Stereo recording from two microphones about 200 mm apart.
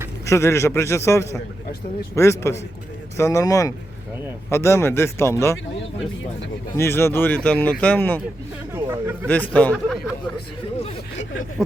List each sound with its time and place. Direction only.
0.3 s a man's voice: 15° left (ahead or behind)
6.7 s a man's voice: 10° left (ahead or behind)
8.7 s speech: 10° right (ahead or behind)
9.2 s a man's voice: 5° left (ahead or behind)